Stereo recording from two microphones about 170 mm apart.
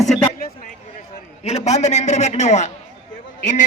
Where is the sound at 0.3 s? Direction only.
60° left (ahead or behind).